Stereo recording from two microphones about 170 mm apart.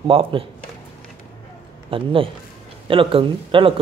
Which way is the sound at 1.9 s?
30° right (ahead or behind).